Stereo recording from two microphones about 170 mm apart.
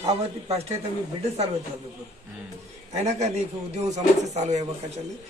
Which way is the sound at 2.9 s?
40° right (ahead or behind).